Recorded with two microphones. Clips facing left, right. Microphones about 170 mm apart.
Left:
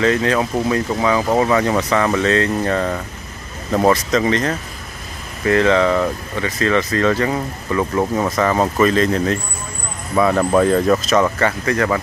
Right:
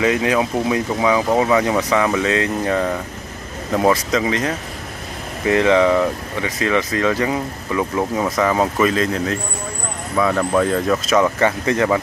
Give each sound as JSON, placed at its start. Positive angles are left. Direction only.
{"t": 0.0, "sound": "speech", "side_deg": -15}
{"t": 10.1, "sound": "speech", "side_deg": 10}
{"t": 11.3, "sound": "speech", "side_deg": -20}